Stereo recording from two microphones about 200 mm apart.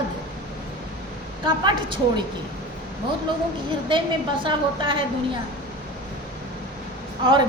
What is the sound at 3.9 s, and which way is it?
A woman's voice, 25° right (ahead or behind).